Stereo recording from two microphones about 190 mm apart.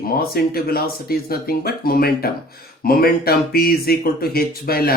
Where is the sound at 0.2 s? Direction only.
55° left (ahead or behind).